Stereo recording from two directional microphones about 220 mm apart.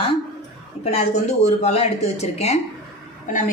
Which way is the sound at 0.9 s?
30° left (ahead or behind).